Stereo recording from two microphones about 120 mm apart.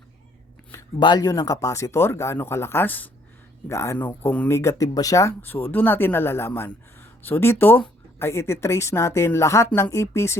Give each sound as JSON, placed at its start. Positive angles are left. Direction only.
{"t": 0.9, "sound": "speech", "side_deg": 40}